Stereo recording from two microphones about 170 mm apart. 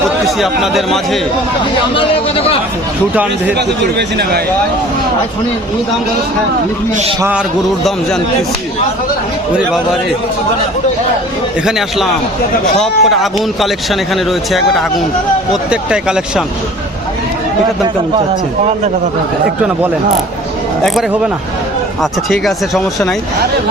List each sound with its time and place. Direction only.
0.3 s speech: centre (ahead or behind)
2.0 s speech: 35° left (ahead or behind)
3.9 s speech: 70° right (ahead or behind)
7.2 s a man's voice: 10° right (ahead or behind)
12.7 s speech: 5° left (ahead or behind)
14.3 s speech: centre (ahead or behind)
22.3 s speech: centre (ahead or behind)